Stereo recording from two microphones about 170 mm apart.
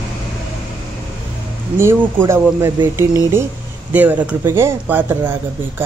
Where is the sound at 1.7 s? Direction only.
15° right (ahead or behind).